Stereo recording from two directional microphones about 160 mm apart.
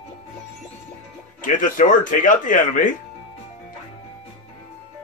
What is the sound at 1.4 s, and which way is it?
Speech, 55° left (ahead or behind).